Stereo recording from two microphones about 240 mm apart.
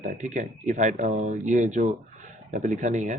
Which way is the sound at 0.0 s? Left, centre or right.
Right.